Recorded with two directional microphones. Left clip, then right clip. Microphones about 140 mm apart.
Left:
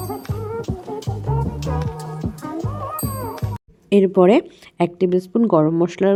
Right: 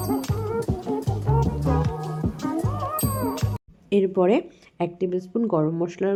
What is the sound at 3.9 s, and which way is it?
A woman's voice, 40° left (ahead or behind).